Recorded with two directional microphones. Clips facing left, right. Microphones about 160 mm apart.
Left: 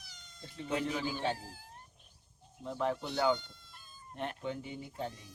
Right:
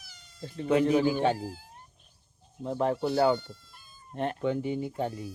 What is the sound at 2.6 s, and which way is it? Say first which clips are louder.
Speech: right 7 dB; 45° right (ahead or behind).